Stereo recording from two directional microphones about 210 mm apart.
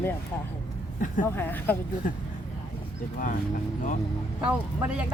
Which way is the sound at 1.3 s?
10° left (ahead or behind).